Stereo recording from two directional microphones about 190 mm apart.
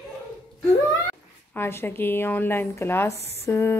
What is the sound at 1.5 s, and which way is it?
A woman's voice, 10° left (ahead or behind).